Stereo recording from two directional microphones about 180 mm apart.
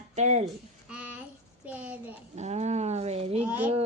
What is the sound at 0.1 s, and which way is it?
Speech, 40° right (ahead or behind).